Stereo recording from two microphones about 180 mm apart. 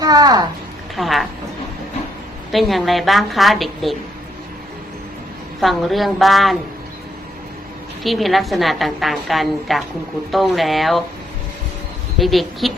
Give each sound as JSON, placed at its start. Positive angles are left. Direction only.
{"t": 0.0, "sound": "a child's voice", "side_deg": -20}
{"t": 0.9, "sound": "a woman's voice", "side_deg": 0}
{"t": 2.5, "sound": "a woman's voice", "side_deg": 0}
{"t": 5.5, "sound": "a woman's voice", "side_deg": 0}
{"t": 8.0, "sound": "a woman's voice", "side_deg": 0}
{"t": 12.2, "sound": "a woman's voice", "side_deg": 0}